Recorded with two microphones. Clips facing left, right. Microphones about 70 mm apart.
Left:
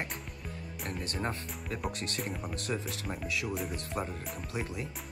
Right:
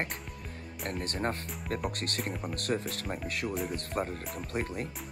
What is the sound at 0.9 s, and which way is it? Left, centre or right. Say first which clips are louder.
Speech: right 3 dB; right.